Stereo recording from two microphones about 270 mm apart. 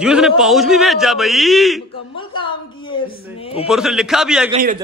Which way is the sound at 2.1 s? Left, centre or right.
Centre.